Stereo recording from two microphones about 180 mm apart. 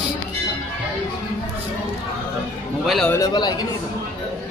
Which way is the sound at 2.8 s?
Centre (ahead or behind).